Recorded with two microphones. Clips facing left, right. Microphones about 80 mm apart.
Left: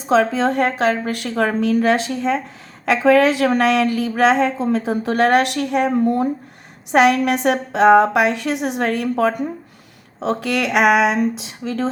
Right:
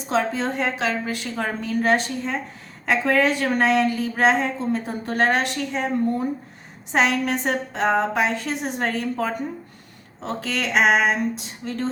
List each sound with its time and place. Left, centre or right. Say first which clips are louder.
0.2 s a woman's voice: left 7 dB; left
0.6 s a woman's voice: left 6 dB; left